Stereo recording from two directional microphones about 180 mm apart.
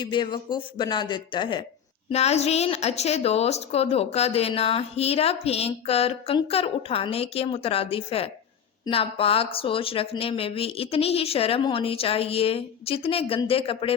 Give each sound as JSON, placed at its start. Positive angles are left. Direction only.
{"t": 0.0, "sound": "a woman's voice", "side_deg": 25}